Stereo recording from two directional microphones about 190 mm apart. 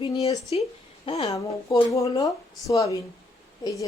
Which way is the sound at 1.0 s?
30° left (ahead or behind).